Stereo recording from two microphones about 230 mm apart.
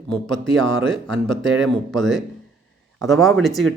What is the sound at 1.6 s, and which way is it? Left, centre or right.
Speech, centre.